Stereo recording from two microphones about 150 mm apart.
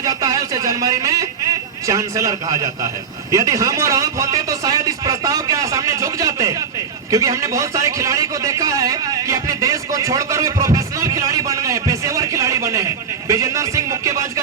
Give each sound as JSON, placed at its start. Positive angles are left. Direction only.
{"t": 0.0, "sound": "a man's voice", "side_deg": -25}